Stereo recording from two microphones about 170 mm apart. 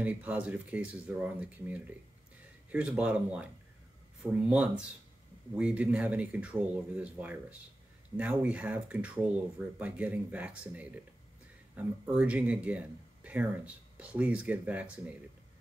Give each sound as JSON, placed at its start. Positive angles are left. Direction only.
{"t": 0.0, "sound": "speech", "side_deg": -10}